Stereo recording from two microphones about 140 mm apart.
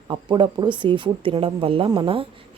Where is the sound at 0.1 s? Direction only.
35° right (ahead or behind).